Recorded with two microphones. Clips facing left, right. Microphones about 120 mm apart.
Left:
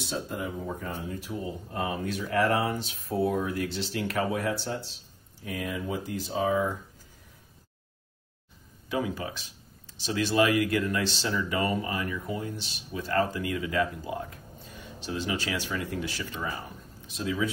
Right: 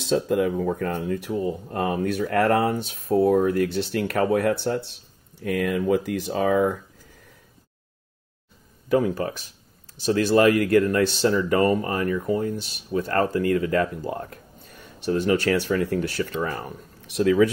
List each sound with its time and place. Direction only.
0.0 s speech: 90° right
8.9 s speech: 50° right (ahead or behind); by 17.5 s 65° right (ahead or behind)